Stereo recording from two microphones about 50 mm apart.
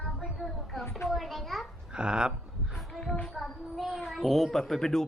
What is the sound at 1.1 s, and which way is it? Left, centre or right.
Speech, centre.